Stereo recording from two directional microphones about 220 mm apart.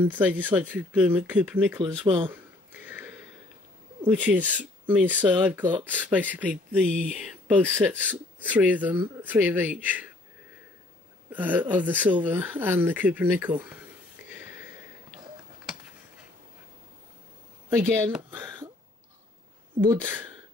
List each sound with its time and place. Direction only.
0.0 s speech: 10° right (ahead or behind)
1.8 s speech: 25° right (ahead or behind)
2.3 s a sound: 10° right (ahead or behind)
4.0 s speech: 5° right (ahead or behind)
11.3 s speech: 5° right (ahead or behind)
14.3 s a sound: 10° right (ahead or behind)
17.6 s speech: 10° right (ahead or behind)
19.9 s speech: 10° right (ahead or behind)